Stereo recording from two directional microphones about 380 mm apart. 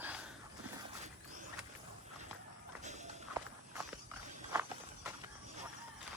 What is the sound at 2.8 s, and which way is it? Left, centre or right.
Walk, centre.